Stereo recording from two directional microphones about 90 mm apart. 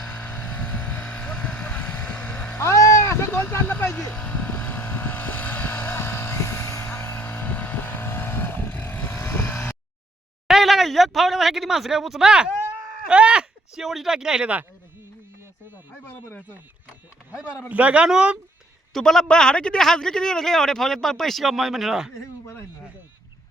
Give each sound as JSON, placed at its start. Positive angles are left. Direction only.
{"t": 0.0, "sound": "vehicle", "side_deg": 20}
{"t": 10.5, "sound": "speech", "side_deg": 0}
{"t": 17.7, "sound": "a man's voice", "side_deg": -15}
{"t": 18.9, "sound": "a man's voice", "side_deg": 5}